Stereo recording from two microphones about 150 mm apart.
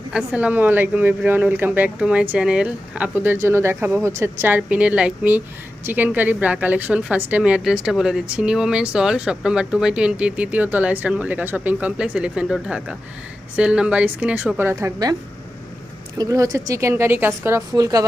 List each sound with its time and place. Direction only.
0.1 s a woman's voice: 5° right (ahead or behind); by 15.1 s 25° right (ahead or behind)
16.1 s a woman's voice: 25° right (ahead or behind)